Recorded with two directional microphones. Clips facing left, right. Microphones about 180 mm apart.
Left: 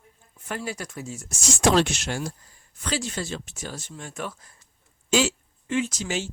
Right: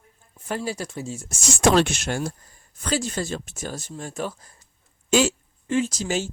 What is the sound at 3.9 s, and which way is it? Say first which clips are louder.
Speech: right 4 dB; 35° right (ahead or behind).